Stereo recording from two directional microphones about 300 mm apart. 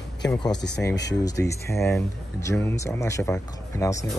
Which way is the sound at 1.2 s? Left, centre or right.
Centre.